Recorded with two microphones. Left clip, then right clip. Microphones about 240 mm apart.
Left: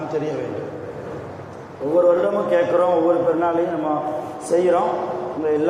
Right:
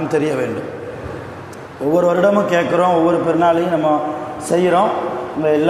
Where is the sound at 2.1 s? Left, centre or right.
Right.